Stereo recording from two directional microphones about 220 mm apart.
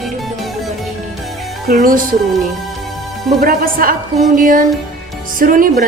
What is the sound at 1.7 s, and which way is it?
Speech, 40° right (ahead or behind).